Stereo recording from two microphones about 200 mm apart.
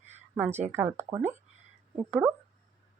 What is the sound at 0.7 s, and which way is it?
Speech, 10° right (ahead or behind).